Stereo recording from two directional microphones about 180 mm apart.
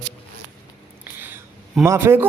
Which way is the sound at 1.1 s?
10° right (ahead or behind).